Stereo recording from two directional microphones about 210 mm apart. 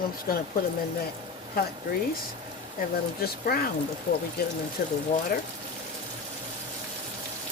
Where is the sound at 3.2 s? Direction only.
45° left (ahead or behind).